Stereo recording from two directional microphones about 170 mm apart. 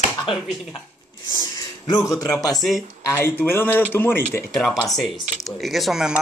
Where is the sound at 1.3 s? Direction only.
25° left (ahead or behind).